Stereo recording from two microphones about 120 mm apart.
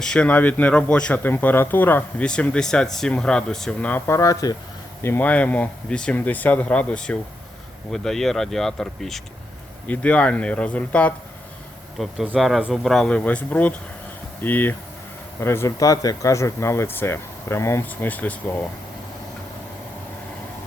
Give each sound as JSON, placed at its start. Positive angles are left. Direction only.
{"t": 0.0, "sound": "speech", "side_deg": 10}
{"t": 5.0, "sound": "speech", "side_deg": 15}
{"t": 11.9, "sound": "speech", "side_deg": -5}